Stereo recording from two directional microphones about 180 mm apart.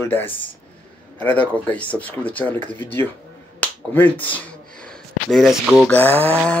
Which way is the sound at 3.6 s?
10° left (ahead or behind).